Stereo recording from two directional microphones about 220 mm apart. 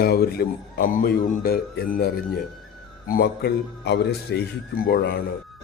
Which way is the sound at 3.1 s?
45° left (ahead or behind).